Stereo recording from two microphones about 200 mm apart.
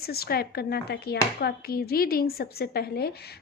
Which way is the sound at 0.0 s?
50° left (ahead or behind).